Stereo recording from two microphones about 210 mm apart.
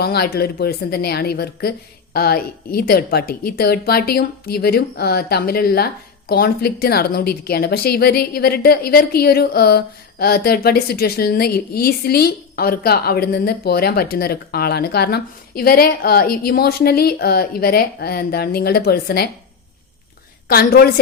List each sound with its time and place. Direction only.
0.0 s a woman's voice: 50° left (ahead or behind)
20.5 s a woman's voice: 45° left (ahead or behind)